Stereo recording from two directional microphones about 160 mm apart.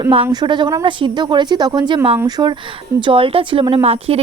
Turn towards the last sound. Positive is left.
turn(degrees=-40)  # may be behind; listen again after turning